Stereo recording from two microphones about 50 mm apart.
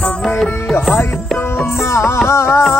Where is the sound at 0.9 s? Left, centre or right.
Left.